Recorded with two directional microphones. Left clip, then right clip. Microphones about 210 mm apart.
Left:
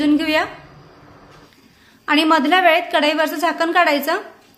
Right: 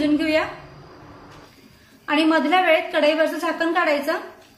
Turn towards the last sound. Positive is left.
turn(degrees=55)  # may be behind; listen again after turning